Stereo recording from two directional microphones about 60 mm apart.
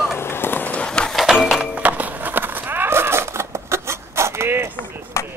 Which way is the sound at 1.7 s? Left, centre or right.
Right.